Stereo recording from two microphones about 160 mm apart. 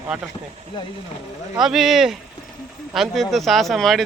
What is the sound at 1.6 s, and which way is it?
Speech, centre (ahead or behind).